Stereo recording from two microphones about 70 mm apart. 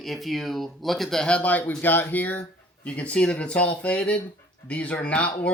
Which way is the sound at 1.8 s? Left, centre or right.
Left.